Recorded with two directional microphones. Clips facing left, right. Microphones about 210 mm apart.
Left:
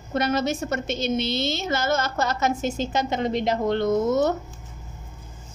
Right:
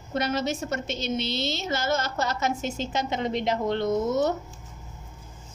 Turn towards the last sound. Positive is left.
turn(degrees=45)  # may be behind; listen again after turning